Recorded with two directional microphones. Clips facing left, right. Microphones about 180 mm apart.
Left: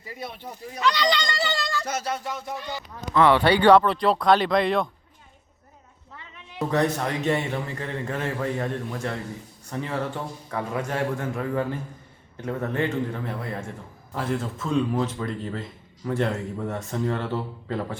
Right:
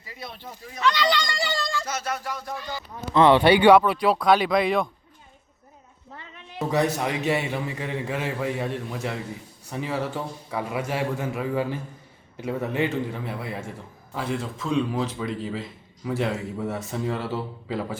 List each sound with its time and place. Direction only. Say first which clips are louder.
0.8 s speech: even; centre (ahead or behind)
2.0 s music: left 1 dB; 25° left (ahead or behind)
3.2 s a man's voice: right 2 dB; 20° right (ahead or behind); by 4.9 s centre (ahead or behind)
6.7 s a man's voice: even; 10° right (ahead or behind)